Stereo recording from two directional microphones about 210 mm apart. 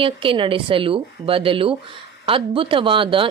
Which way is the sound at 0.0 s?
25° right (ahead or behind).